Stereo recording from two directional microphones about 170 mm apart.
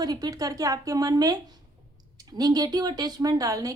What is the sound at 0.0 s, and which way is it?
Speech, 20° right (ahead or behind).